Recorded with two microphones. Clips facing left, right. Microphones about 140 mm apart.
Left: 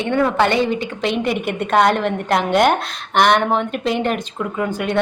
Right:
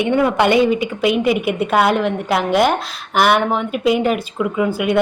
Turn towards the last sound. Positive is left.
turn(degrees=-10)  # may be behind; listen again after turning